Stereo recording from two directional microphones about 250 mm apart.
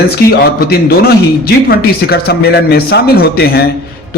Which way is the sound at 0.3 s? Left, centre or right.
Left.